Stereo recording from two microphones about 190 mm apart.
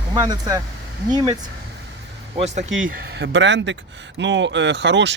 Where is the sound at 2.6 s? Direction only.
90° right.